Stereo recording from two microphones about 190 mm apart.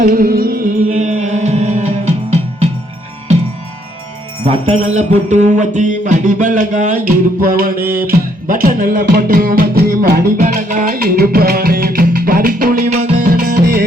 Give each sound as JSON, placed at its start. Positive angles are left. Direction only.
{"t": 0.0, "sound": "music", "side_deg": -45}
{"t": 4.4, "sound": "speech", "side_deg": -35}
{"t": 4.9, "sound": "music", "side_deg": -40}